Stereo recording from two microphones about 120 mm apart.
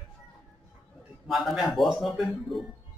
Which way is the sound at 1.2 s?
Centre (ahead or behind).